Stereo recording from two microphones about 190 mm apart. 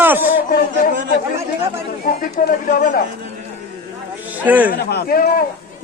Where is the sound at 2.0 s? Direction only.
45° left (ahead or behind).